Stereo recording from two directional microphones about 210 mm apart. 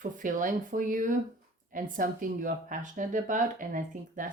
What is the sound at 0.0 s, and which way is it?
Speech, 40° right (ahead or behind).